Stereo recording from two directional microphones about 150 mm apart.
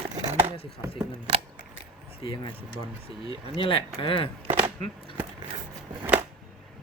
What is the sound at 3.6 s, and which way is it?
Speech, 35° left (ahead or behind).